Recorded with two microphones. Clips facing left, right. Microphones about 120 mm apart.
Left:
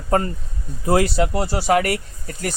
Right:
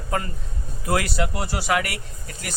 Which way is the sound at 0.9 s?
30° left (ahead or behind).